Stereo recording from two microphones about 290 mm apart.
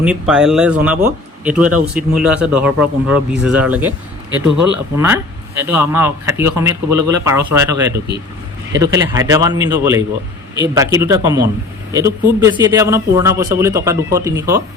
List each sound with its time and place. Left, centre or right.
0.0 s speech: centre
7.9 s speech: right
8.7 s speech: centre